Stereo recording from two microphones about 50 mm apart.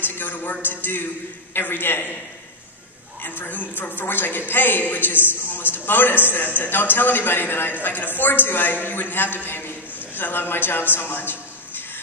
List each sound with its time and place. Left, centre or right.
0.0 s a woman's voice: left
3.2 s a woman's voice: left